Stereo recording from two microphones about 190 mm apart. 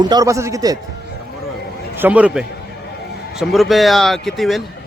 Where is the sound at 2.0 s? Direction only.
10° right (ahead or behind).